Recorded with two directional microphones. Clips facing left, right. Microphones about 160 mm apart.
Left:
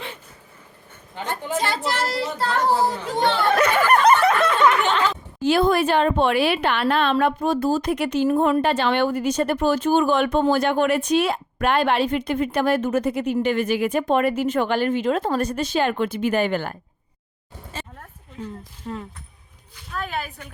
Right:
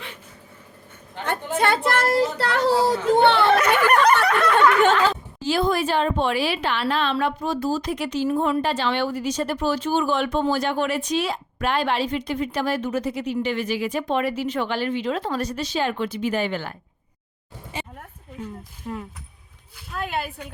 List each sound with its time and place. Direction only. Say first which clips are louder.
1.5 s speech: right 4 dB; 55° right (ahead or behind)
2.4 s speech: right 1 dB; 80° right
3.1 s speech: right 9 dB; 60° right (ahead or behind)
3.6 s a sound: left 1 dB; 25° left (ahead or behind)
5.4 s a woman's voice: left 4 dB; 60° left (ahead or behind)
17.7 s a sound: right 2 dB; 15° right (ahead or behind)
18.4 s a woman's voice: left 1 dB; 10° right (ahead or behind)